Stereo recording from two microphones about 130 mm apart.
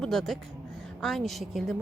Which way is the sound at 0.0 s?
5° left (ahead or behind).